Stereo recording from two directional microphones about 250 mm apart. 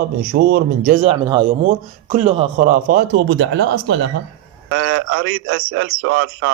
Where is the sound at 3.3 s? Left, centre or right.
Right.